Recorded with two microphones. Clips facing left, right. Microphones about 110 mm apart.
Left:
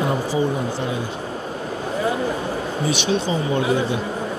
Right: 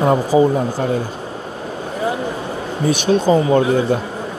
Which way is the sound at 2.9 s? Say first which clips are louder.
Right 9 dB; 45° right (ahead or behind).